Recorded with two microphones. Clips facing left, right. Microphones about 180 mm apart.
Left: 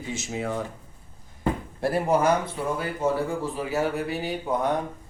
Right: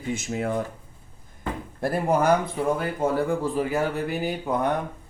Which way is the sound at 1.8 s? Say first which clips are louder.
Even; 50° right (ahead or behind).